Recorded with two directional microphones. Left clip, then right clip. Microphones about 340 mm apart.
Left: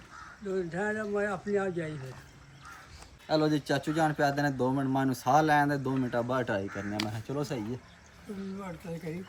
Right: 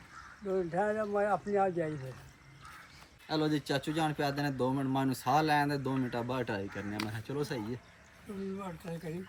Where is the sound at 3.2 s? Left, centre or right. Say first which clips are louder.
Left 5 dB; centre.